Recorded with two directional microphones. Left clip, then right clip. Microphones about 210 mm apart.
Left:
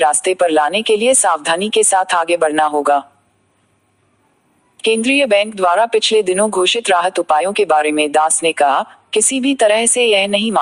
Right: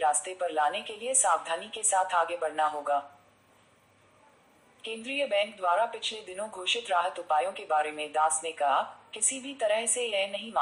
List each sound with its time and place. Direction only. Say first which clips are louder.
0.0 s speech: left 15 dB; 45° left (ahead or behind)
4.8 s speech: left 19 dB; 45° left (ahead or behind)